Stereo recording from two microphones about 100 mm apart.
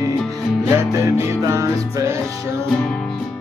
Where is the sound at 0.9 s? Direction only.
30° right (ahead or behind).